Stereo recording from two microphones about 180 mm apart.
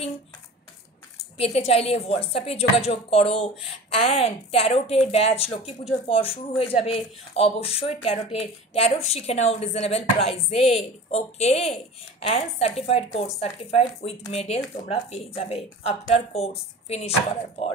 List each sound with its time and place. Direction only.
1.4 s speech: 35° left (ahead or behind)